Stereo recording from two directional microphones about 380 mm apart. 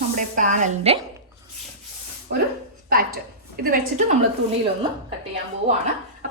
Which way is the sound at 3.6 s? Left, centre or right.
Right.